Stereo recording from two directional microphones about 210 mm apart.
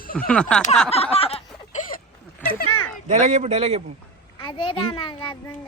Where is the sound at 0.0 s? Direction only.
45° left (ahead or behind).